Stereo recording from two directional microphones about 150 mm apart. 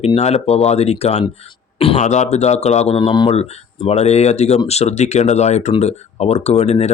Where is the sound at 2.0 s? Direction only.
50° left (ahead or behind).